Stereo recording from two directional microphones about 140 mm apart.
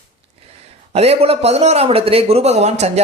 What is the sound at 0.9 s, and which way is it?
Speech, 45° right (ahead or behind).